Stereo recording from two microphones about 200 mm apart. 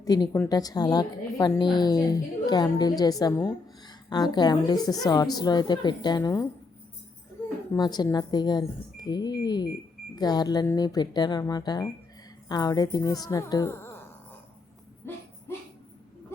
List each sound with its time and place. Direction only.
0.0 s a woman's voice: 20° left (ahead or behind)
7.7 s a woman's voice: 20° left (ahead or behind)
15.1 s a sound: 10° left (ahead or behind)